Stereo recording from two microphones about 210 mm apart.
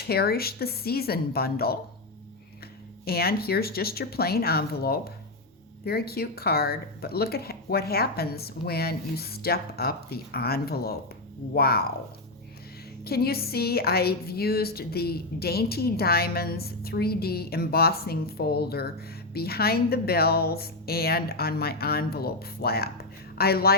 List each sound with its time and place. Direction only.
0.0 s a woman's voice: 45° left (ahead or behind)
3.0 s a woman's voice: 45° left (ahead or behind)
13.1 s a woman's voice: 50° left (ahead or behind)